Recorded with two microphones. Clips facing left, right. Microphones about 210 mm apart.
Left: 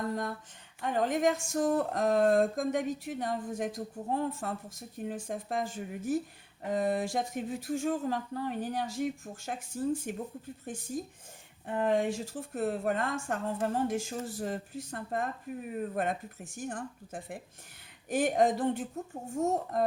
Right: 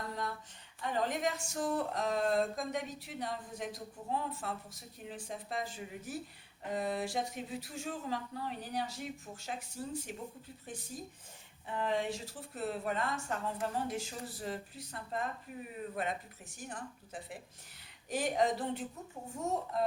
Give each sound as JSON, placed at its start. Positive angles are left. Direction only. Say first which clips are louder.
{"t": 0.8, "sound": "speech", "louder": "left 6 dB", "side_deg": 50}